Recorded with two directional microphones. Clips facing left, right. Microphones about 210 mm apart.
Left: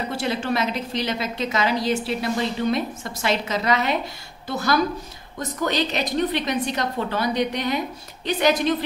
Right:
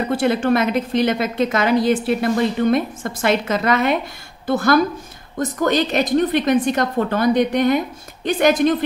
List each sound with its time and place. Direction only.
0.1 s a woman's voice: 50° right (ahead or behind)